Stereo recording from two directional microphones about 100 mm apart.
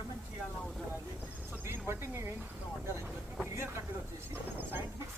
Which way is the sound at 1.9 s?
25° right (ahead or behind).